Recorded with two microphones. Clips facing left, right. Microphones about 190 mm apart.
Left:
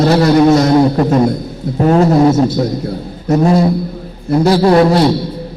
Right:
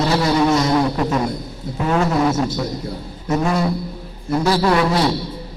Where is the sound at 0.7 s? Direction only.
35° left (ahead or behind).